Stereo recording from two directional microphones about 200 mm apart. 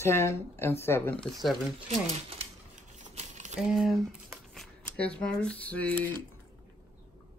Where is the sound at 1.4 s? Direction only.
Centre (ahead or behind).